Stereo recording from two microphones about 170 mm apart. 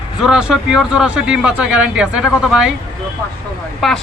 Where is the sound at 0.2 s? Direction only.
5° right (ahead or behind).